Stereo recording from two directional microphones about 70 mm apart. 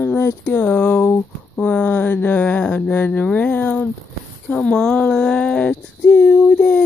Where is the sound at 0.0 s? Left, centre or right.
Left.